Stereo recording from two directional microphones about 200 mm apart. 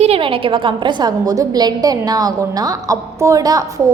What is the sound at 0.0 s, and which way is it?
A woman's voice, 30° right (ahead or behind).